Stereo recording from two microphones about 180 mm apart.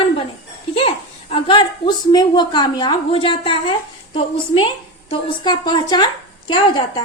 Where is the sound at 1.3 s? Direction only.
30° left (ahead or behind).